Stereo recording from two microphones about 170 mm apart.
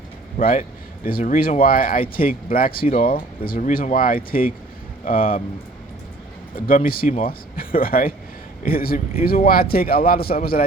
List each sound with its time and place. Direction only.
0.3 s speech: 55° left (ahead or behind)
6.7 s speech: 55° left (ahead or behind)